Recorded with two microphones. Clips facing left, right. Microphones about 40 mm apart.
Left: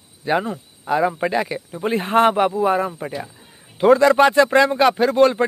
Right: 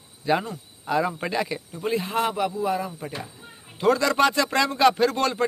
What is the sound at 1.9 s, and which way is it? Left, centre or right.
Speech, left.